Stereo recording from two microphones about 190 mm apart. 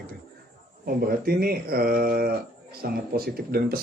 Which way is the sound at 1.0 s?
55° right (ahead or behind).